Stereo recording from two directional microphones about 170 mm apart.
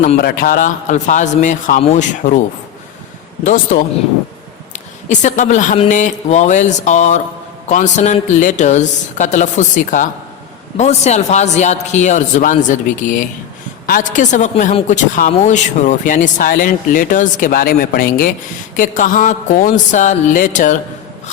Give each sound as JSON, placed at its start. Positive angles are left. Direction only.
{"t": 0.2, "sound": "a woman's voice", "side_deg": 60}
{"t": 3.4, "sound": "a woman's voice", "side_deg": 55}
{"t": 4.7, "sound": "a sound", "side_deg": 45}
{"t": 5.9, "sound": "a woman's voice", "side_deg": 45}
{"t": 13.8, "sound": "a woman's voice", "side_deg": 55}
{"t": 18.8, "sound": "a woman's voice", "side_deg": 50}